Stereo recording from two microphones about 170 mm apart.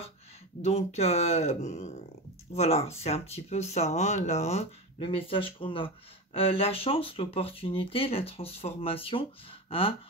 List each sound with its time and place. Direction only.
0.6 s speech: 40° left (ahead or behind)